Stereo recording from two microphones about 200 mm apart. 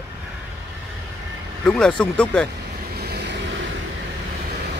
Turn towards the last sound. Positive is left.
turn(degrees=-50)  # may be behind; listen again after turning